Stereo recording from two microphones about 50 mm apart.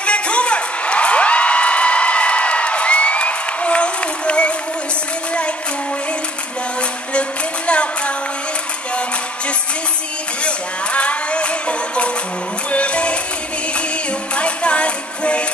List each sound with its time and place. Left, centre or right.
0.0 s music: left
7.2 s music: left
10.4 s music: left
14.3 s music: left